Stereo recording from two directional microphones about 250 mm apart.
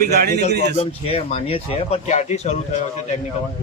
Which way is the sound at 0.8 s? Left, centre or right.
Left.